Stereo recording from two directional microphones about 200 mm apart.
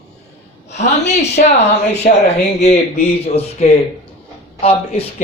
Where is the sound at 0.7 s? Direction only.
35° left (ahead or behind).